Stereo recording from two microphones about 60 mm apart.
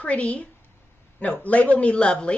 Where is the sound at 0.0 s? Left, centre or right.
Left.